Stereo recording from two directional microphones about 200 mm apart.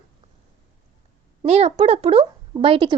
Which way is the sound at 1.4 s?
30° right (ahead or behind).